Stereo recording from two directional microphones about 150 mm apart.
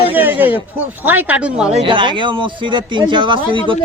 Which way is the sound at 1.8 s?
35° right (ahead or behind).